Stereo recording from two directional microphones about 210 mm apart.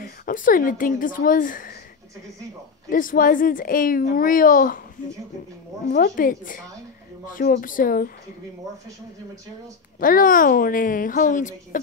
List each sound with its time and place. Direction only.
0.0 s a woman's voice: 40° left (ahead or behind)
2.9 s a woman's voice: 40° left (ahead or behind)
5.9 s a woman's voice: 45° left (ahead or behind)
9.9 s a woman's voice: 40° left (ahead or behind)